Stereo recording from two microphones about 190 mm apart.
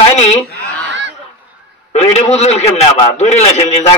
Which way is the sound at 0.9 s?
70° right (ahead or behind).